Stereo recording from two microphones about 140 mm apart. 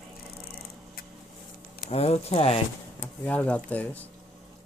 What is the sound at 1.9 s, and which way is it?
Speech, 45° left (ahead or behind).